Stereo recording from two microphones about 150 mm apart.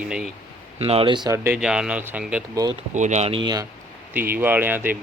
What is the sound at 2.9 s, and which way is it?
Speech, 55° right (ahead or behind).